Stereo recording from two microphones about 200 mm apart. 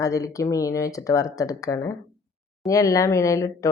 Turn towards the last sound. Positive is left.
turn(degrees=15)  # may be behind; listen again after turning